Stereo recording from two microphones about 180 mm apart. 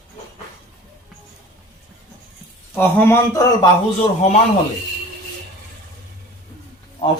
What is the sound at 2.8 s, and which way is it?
Speech, 10° left (ahead or behind).